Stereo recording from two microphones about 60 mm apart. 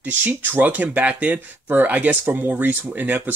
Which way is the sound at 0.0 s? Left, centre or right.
Right.